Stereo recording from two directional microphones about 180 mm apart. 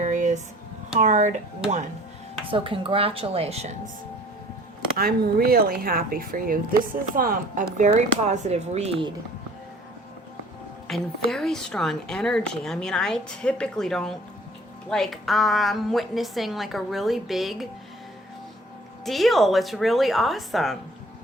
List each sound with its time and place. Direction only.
0.0 s a sound: 45° right (ahead or behind)
0.9 s a woman's voice: 40° right (ahead or behind)
2.5 s a woman's voice: 30° right (ahead or behind)
4.9 s speech: 60° right (ahead or behind); by 9.1 s 30° right (ahead or behind)
10.8 s a woman's voice: centre (ahead or behind)
19.0 s a woman's voice: centre (ahead or behind)